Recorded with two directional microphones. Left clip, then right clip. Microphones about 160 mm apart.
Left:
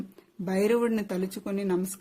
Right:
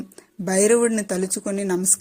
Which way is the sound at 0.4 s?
30° right (ahead or behind).